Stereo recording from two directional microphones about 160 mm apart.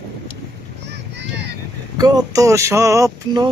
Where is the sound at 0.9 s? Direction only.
90° right.